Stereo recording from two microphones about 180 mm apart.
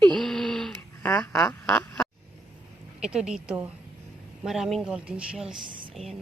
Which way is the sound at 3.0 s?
5° right (ahead or behind).